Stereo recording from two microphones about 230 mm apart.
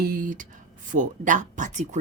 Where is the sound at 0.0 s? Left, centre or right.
Right.